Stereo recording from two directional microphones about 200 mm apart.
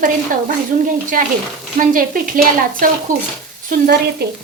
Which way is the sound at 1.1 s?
45° right (ahead or behind).